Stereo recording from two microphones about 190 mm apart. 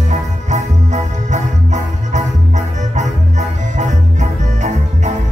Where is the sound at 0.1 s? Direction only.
40° right (ahead or behind).